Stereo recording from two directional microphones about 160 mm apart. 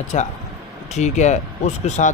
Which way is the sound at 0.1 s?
45° left (ahead or behind).